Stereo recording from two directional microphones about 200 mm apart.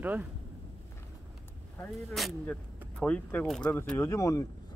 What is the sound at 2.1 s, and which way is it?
Speech, centre (ahead or behind).